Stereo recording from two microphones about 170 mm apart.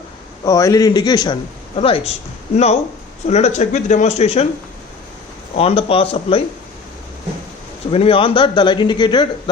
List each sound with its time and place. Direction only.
0.4 s a man's voice: 20° left (ahead or behind)
3.2 s speech: 40° left (ahead or behind)
5.5 s speech: 35° left (ahead or behind)
7.9 s a man's voice: 35° left (ahead or behind)